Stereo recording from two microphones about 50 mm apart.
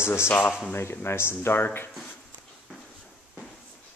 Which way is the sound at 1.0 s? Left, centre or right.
Left.